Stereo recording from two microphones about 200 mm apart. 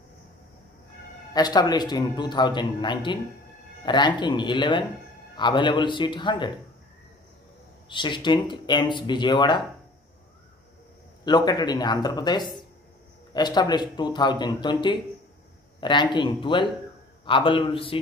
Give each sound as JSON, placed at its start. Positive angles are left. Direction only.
{"t": 1.3, "sound": "a man's voice", "side_deg": 20}
{"t": 7.9, "sound": "a man's voice", "side_deg": 25}
{"t": 11.2, "sound": "a man's voice", "side_deg": 20}